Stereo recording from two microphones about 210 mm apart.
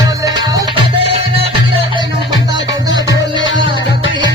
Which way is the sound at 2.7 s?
15° right (ahead or behind).